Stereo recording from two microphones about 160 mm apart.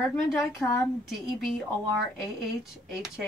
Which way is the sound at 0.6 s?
Centre (ahead or behind).